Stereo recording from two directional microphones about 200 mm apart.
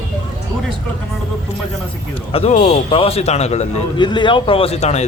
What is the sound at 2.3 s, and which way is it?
A man's voice, 30° left (ahead or behind).